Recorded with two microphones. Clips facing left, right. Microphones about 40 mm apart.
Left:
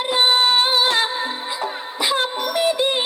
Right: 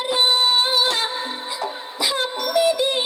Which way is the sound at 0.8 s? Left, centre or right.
Left.